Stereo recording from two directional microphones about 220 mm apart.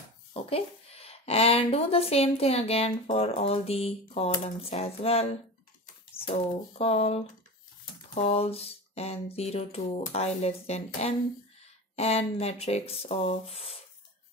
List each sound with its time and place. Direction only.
0.3 s speech: 25° left (ahead or behind)
6.3 s speech: 30° left (ahead or behind)